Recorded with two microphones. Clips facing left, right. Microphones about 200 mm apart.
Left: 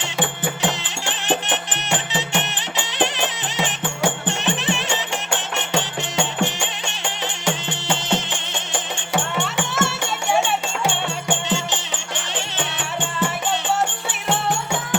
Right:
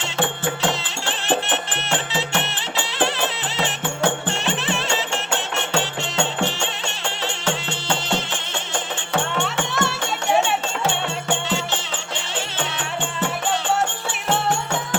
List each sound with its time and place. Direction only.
0.6 s music: 15° left (ahead or behind)
9.1 s music: 5° left (ahead or behind)
11.3 s music: 15° left (ahead or behind)